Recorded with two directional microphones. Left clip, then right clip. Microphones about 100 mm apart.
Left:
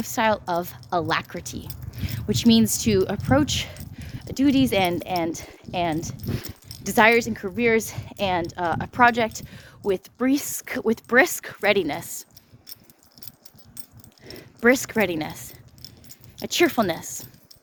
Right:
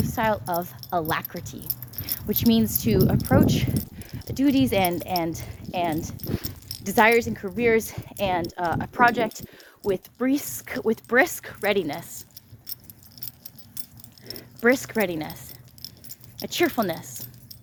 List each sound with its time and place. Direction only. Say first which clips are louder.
0.0 s speech: left 2 dB; 35° left (ahead or behind)
1.6 s keys jangling: right 2 dB; 90° right
2.0 s speech: left 3 dB; 45° left (ahead or behind); by 3.8 s 25° left (ahead or behind)
3.9 s dog: left 1 dB; 40° left (ahead or behind)
4.4 s speech: left 1 dB; 20° left (ahead or behind); by 7.6 s 45° left (ahead or behind)
7.6 s speech: even; 20° left (ahead or behind); by 11.6 s 35° left (ahead or behind)
11.6 s a woman's voice: left 3 dB; 65° left (ahead or behind)
12.6 s keys jangling: right 3 dB; 80° right
14.3 s speech: left 2 dB; 45° left (ahead or behind); by 15.5 s 60° left (ahead or behind)
15.8 s keys jangling: right 3 dB; 90° right
16.6 s a woman's voice: left 2 dB; 70° left (ahead or behind)